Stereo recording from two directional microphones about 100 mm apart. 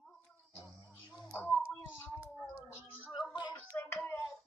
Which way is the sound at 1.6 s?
25° left (ahead or behind).